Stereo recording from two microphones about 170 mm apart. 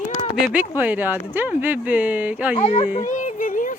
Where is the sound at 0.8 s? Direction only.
10° right (ahead or behind).